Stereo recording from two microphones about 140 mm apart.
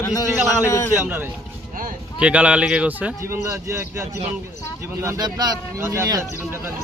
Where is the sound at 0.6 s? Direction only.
20° left (ahead or behind).